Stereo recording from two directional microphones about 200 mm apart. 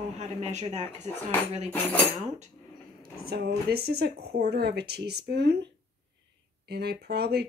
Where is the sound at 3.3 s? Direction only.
50° right (ahead or behind).